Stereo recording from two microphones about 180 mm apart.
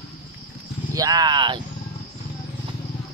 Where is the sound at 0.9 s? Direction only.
20° right (ahead or behind).